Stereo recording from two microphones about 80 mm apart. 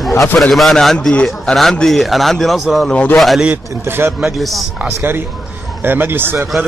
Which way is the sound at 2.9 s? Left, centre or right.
Centre.